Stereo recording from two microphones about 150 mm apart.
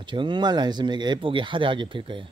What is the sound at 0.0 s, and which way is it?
Speech, 30° right (ahead or behind).